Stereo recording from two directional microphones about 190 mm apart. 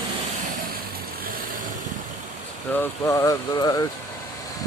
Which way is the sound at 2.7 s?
10° left (ahead or behind).